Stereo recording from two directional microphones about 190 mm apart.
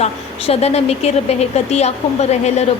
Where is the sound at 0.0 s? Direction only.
35° left (ahead or behind).